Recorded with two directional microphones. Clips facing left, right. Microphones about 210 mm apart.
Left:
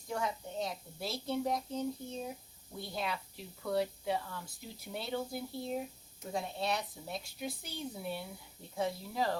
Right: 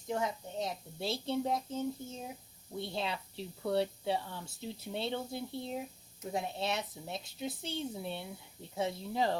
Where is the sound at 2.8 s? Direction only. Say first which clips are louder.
Even; 25° right (ahead or behind).